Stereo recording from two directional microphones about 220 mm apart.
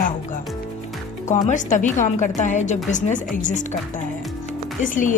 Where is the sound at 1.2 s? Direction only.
35° left (ahead or behind).